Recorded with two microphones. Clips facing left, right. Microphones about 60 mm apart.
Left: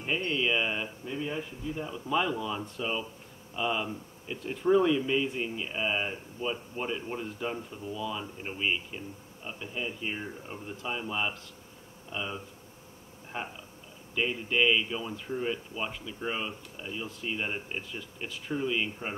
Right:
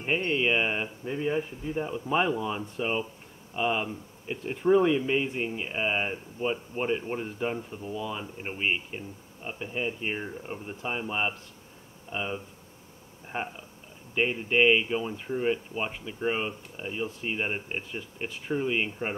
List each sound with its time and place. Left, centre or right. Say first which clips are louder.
0.0 s speech: right 3 dB; right